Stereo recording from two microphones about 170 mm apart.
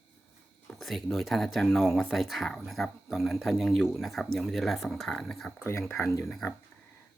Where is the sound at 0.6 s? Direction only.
Centre (ahead or behind).